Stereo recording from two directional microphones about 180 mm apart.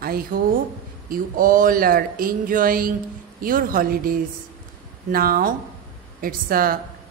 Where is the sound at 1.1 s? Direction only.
50° right (ahead or behind).